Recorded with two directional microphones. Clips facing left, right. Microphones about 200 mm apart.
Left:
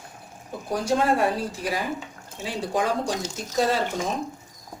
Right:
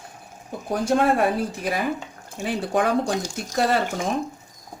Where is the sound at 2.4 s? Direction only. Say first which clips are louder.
Right 3 dB; 60° right (ahead or behind).